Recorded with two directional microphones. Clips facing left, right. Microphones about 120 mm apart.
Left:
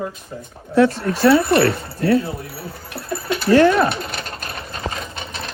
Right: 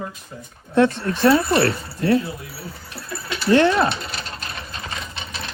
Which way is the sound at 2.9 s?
55° left (ahead or behind).